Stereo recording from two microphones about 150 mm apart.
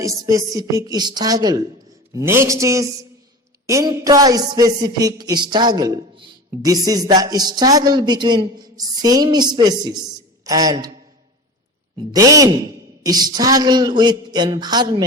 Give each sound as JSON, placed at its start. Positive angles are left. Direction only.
{"t": 0.0, "sound": "a man's voice", "side_deg": -20}
{"t": 11.9, "sound": "a man's voice", "side_deg": -25}